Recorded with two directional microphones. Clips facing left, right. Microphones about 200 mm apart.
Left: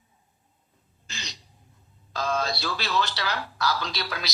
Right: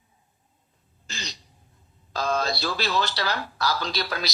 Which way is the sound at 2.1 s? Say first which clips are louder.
Right 2 dB; 35° right (ahead or behind).